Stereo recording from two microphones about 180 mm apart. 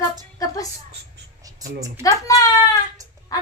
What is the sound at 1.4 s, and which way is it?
Speech, 20° right (ahead or behind).